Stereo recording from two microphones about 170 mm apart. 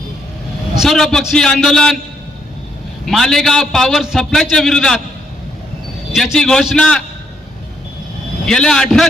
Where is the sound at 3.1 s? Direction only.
Centre (ahead or behind).